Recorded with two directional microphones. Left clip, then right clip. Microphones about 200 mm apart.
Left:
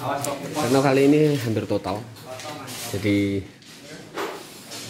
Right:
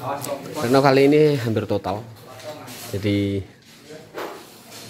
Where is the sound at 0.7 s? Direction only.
20° right (ahead or behind).